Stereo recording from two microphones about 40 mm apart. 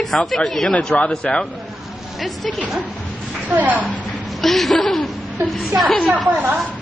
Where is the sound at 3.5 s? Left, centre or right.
Right.